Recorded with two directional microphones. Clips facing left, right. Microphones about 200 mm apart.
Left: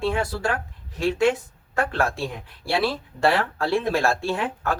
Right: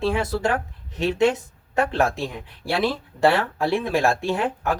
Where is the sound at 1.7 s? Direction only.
20° right (ahead or behind).